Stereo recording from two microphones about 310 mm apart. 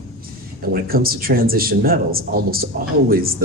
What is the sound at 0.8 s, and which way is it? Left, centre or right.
A man's voice, right.